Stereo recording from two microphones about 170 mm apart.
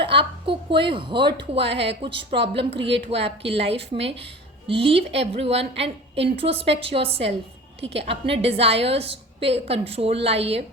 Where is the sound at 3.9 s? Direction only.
90° right.